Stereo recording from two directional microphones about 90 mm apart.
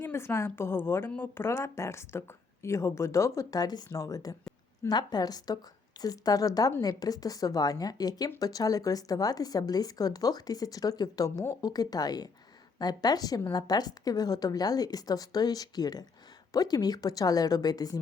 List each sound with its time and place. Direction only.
0.0 s a woman's voice: 30° left (ahead or behind); by 18.0 s 45° left (ahead or behind)